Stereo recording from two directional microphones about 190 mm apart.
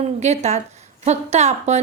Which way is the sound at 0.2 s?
35° right (ahead or behind).